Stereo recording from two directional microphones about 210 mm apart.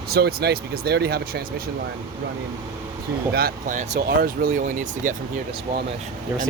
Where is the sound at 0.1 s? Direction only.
50° right (ahead or behind).